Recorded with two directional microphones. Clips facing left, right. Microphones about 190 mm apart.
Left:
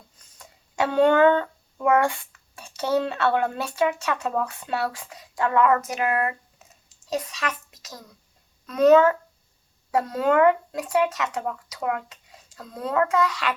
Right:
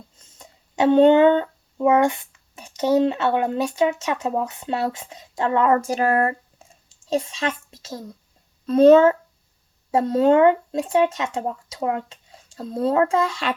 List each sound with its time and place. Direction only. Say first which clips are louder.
0.2 s speech: right 3 dB; 25° right (ahead or behind)